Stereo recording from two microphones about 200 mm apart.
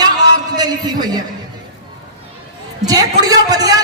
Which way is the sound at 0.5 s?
20° right (ahead or behind).